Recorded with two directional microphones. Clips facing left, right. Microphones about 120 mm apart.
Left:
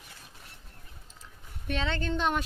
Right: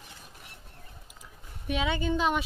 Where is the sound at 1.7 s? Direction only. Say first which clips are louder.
Right 3 dB; 10° right (ahead or behind).